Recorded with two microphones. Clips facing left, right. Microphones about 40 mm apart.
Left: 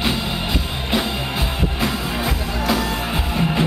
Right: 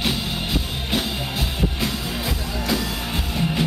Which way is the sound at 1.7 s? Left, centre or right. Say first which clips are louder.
Left 4 dB; centre.